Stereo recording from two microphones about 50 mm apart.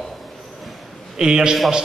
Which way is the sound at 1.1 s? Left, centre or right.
Centre.